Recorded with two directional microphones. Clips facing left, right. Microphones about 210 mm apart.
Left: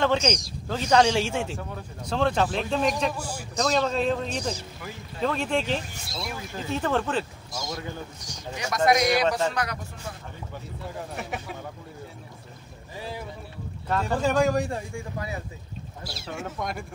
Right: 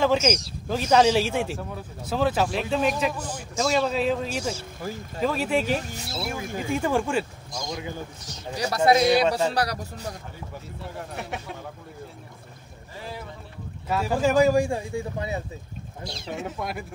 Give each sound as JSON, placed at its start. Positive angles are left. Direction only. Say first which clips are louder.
{"t": 0.0, "sound": "speech", "louder": "right 2 dB", "side_deg": -5}
{"t": 3.2, "sound": "a man's voice", "louder": "right 1 dB", "side_deg": 10}
{"t": 3.5, "sound": "a man's voice", "louder": "right 1 dB", "side_deg": -5}
{"t": 7.5, "sound": "a man's voice", "louder": "right 1 dB", "side_deg": 5}
{"t": 8.5, "sound": "a man's voice", "louder": "right 2 dB", "side_deg": -35}
{"t": 10.8, "sound": "a man's voice", "louder": "even", "side_deg": 0}
{"t": 13.8, "sound": "speech", "louder": "right 2 dB", "side_deg": -5}
{"t": 15.1, "sound": "a man's voice", "louder": "right 3 dB", "side_deg": -25}
{"t": 16.0, "sound": "a man's voice", "louder": "right 4 dB", "side_deg": 5}
{"t": 16.3, "sound": "speech", "louder": "right 2 dB", "side_deg": -15}
{"t": 16.5, "sound": "a man's voice", "louder": "even", "side_deg": -5}